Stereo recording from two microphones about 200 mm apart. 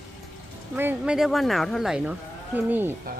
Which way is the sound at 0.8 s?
10° right (ahead or behind).